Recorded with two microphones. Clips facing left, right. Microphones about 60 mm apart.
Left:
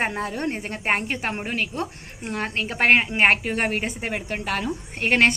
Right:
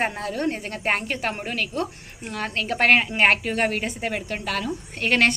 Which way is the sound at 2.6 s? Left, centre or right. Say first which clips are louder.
Even; centre.